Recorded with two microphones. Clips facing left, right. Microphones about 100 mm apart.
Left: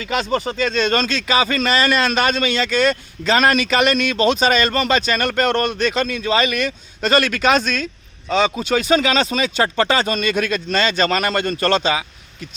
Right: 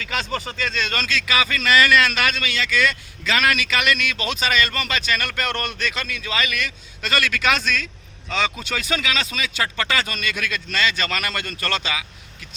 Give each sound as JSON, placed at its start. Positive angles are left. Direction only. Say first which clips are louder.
{"t": 0.0, "sound": "speech", "louder": "left 6 dB", "side_deg": 20}